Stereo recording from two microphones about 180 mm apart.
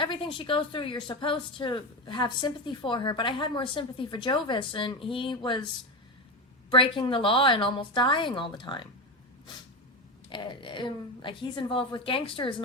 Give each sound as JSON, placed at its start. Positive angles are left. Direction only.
{"t": 0.0, "sound": "a woman's voice", "side_deg": 30}
{"t": 6.7, "sound": "a woman's voice", "side_deg": 30}
{"t": 10.2, "sound": "a woman's voice", "side_deg": 25}